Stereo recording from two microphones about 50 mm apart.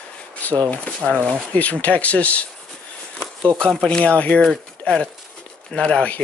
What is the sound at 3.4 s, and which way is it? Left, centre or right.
Speech, centre.